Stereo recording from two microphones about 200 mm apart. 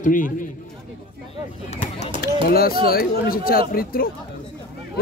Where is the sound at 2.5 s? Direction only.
50° left (ahead or behind).